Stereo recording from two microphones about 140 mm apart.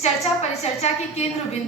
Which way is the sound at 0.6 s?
50° left (ahead or behind).